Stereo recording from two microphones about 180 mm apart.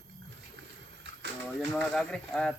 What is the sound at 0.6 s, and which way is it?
Rowboat, 75° right (ahead or behind).